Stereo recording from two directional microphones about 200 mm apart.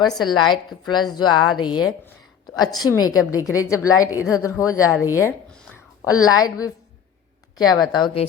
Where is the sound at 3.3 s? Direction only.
15° left (ahead or behind).